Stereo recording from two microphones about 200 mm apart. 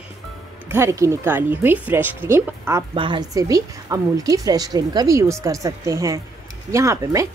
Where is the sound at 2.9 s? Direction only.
25° right (ahead or behind).